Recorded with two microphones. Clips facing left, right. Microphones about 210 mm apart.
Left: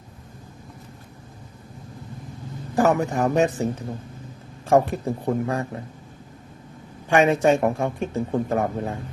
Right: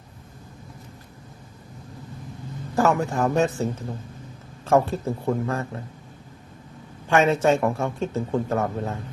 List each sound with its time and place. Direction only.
2.7 s speech: 20° left (ahead or behind)
7.1 s speech: 15° left (ahead or behind)